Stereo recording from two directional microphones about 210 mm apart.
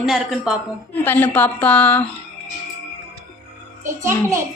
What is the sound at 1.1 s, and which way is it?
Speech, 10° left (ahead or behind).